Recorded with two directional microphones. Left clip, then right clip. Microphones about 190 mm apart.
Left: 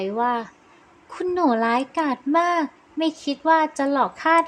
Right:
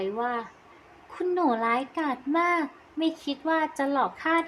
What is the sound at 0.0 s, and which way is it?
A woman's voice, 30° left (ahead or behind).